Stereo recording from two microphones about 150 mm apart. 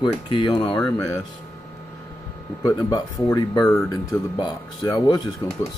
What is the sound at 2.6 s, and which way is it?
Speech, 25° left (ahead or behind).